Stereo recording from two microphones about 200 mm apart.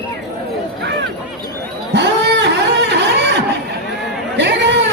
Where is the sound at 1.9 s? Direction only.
60° right (ahead or behind).